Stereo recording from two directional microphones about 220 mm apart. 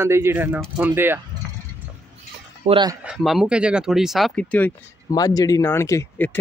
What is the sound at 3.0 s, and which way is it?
Speech, centre (ahead or behind).